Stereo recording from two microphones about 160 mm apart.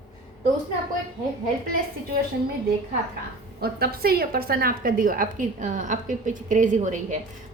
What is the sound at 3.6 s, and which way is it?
A woman's voice, 75° right (ahead or behind).